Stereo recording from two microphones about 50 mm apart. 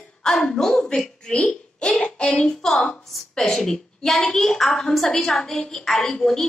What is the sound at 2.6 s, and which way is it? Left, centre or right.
A woman's voice, centre.